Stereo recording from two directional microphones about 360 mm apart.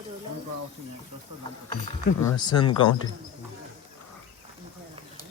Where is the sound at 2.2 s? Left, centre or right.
Centre.